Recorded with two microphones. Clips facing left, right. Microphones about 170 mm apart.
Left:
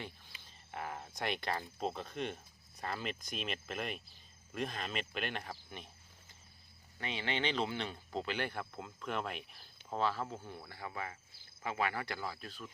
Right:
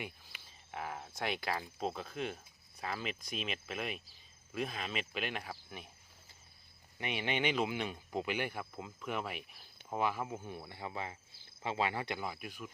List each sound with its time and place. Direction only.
0.7 s speech: centre (ahead or behind)
7.0 s speech: 15° right (ahead or behind)